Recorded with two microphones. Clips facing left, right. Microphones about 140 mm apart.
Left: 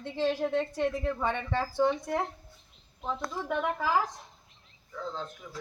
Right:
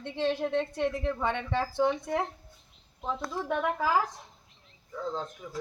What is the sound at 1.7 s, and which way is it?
Speech, 10° right (ahead or behind).